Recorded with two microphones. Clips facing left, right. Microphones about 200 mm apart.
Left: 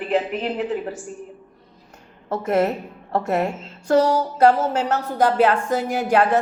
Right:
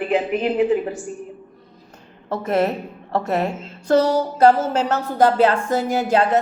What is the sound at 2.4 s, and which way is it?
A woman's voice, 35° right (ahead or behind).